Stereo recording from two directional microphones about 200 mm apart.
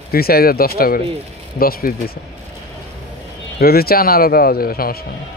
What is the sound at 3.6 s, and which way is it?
Speech, 50° left (ahead or behind).